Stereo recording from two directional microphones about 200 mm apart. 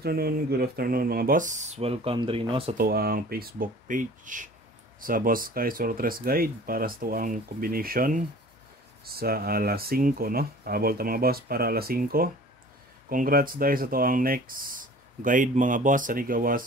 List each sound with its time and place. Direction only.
0.0 s speech: 50° right (ahead or behind); by 2.7 s 25° right (ahead or behind)
2.8 s speech: 50° right (ahead or behind)